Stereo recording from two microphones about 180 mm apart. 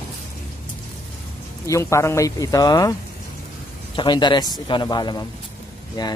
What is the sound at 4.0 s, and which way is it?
Speech, 25° left (ahead or behind).